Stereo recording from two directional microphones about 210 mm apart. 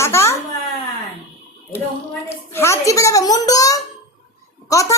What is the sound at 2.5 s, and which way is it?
A woman's voice, 10° left (ahead or behind).